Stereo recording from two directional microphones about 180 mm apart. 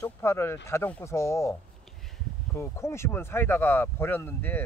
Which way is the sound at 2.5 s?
15° left (ahead or behind).